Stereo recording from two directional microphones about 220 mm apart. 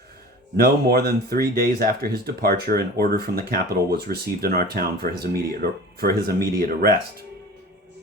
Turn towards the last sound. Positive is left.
turn(degrees=-40)  # may be behind; listen again after turning